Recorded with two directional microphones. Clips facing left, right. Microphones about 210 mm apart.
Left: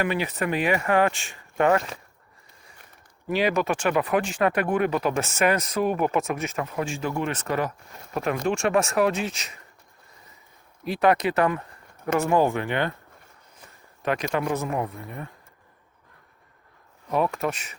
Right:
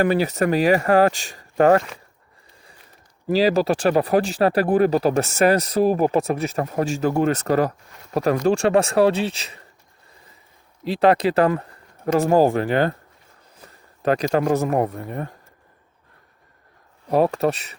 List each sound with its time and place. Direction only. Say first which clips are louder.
0.0 s speech: right 7 dB; 40° right (ahead or behind)
3.2 s speech: right 5 dB; 35° right (ahead or behind)
10.8 s speech: right 4 dB; 30° right (ahead or behind)
13.6 s a sound: right 6 dB; 35° right (ahead or behind)
14.7 s speech: right 7 dB; 45° right (ahead or behind)
17.1 s speech: right 6 dB; 35° right (ahead or behind)